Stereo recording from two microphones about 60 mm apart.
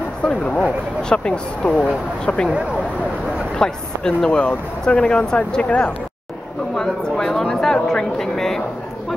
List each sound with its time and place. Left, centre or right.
0.3 s speech: centre
3.5 s speech: centre
6.7 s speech: centre